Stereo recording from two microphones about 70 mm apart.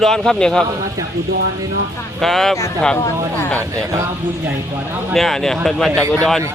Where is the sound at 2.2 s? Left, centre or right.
Centre.